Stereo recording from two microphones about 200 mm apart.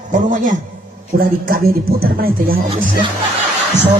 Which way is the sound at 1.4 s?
50° right (ahead or behind).